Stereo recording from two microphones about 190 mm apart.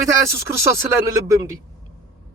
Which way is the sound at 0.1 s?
15° right (ahead or behind).